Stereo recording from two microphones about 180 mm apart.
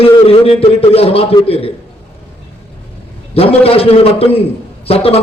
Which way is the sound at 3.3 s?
35° left (ahead or behind).